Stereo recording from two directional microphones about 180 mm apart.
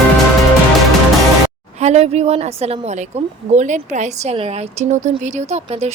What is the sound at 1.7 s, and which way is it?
A woman's voice, 40° right (ahead or behind).